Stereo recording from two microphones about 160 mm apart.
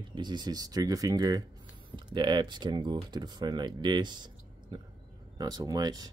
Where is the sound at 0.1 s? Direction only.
25° right (ahead or behind).